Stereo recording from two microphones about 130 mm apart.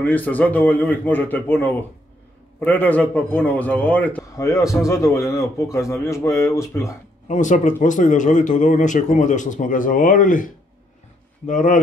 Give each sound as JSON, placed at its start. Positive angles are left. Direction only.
{"t": 0.0, "sound": "a man's voice", "side_deg": 10}
{"t": 4.2, "sound": "a man's voice", "side_deg": 25}
{"t": 7.2, "sound": "speech", "side_deg": 75}
{"t": 11.4, "sound": "speech", "side_deg": 80}